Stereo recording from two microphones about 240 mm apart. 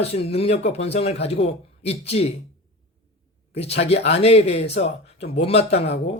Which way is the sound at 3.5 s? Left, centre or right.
Left.